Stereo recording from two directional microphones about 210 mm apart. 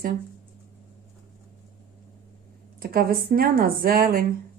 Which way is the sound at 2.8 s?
45° right (ahead or behind).